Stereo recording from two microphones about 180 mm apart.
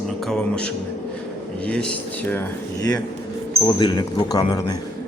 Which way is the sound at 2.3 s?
20° left (ahead or behind).